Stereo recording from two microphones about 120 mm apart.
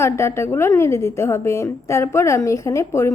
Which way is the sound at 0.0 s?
20° left (ahead or behind).